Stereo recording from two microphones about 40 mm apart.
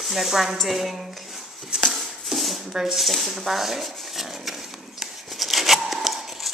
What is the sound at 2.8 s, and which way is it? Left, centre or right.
Speech, centre.